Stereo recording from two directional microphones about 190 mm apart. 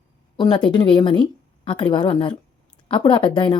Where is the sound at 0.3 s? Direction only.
25° left (ahead or behind).